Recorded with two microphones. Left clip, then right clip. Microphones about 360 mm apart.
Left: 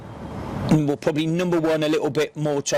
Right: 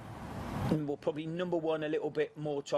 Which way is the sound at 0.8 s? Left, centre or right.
Left.